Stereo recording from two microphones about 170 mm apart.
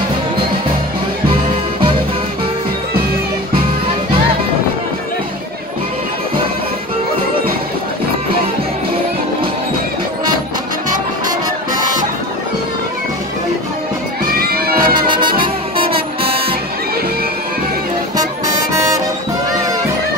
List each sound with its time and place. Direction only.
14.2 s music: 60° right (ahead or behind)
15.4 s music: 30° right (ahead or behind)
18.1 s music: 20° right (ahead or behind)